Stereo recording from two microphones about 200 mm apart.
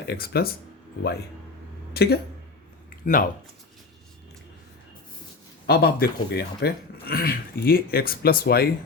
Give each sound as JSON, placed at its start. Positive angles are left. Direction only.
{"t": 0.1, "sound": "speech", "side_deg": 50}
{"t": 1.9, "sound": "speech", "side_deg": 55}
{"t": 5.6, "sound": "speech", "side_deg": 50}